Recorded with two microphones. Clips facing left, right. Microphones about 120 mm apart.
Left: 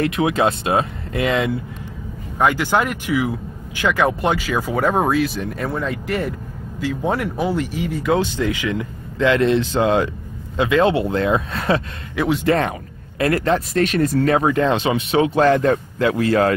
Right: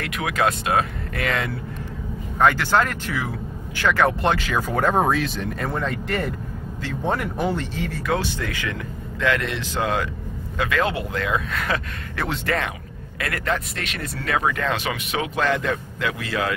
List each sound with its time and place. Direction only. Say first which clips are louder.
0.0 s a man's voice: left 5 dB; 25° left (ahead or behind)
12.2 s a man's voice: left 8 dB; 15° left (ahead or behind)
13.2 s speech: left 8 dB; 30° left (ahead or behind)